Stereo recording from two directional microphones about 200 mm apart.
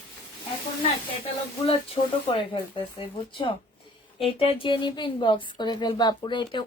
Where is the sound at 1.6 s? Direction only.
30° left (ahead or behind).